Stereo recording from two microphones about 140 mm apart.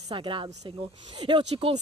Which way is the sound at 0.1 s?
35° right (ahead or behind).